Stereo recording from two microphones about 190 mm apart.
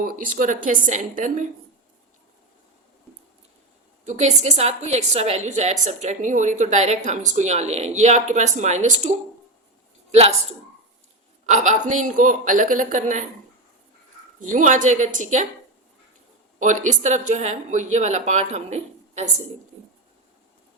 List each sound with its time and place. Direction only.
0.0 s a woman's voice: 45° right (ahead or behind)
4.0 s a woman's voice: 40° right (ahead or behind)
11.4 s a woman's voice: 40° right (ahead or behind)
14.3 s a woman's voice: 45° right (ahead or behind)
16.6 s a woman's voice: 40° right (ahead or behind)